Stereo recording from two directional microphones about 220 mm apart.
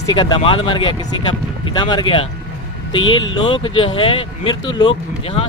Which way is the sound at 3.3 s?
20° left (ahead or behind).